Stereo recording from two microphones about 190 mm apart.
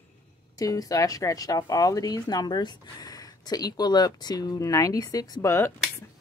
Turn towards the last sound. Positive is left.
turn(degrees=15)  # may be behind; listen again after turning